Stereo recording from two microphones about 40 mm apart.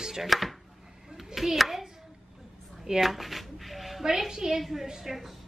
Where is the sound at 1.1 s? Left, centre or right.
Centre.